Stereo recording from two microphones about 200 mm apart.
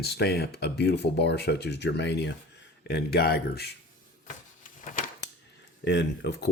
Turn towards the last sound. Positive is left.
turn(degrees=60)  # may be behind; listen again after turning